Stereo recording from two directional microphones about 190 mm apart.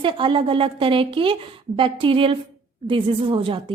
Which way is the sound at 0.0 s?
25° right (ahead or behind).